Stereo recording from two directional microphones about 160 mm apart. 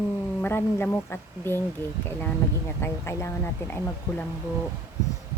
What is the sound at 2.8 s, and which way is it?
Speech, 15° left (ahead or behind).